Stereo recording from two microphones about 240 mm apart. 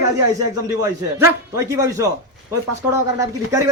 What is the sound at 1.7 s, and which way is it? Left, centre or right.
Speech, centre.